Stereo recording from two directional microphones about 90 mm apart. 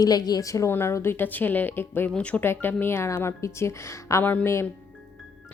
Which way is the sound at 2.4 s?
25° left (ahead or behind).